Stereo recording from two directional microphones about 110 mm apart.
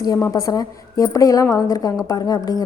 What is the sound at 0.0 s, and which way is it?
A woman's voice, 30° left (ahead or behind).